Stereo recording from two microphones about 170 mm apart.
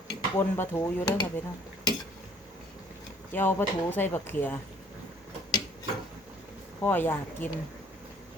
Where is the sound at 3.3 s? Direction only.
10° left (ahead or behind).